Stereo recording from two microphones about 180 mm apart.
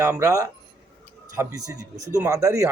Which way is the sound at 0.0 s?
15° right (ahead or behind).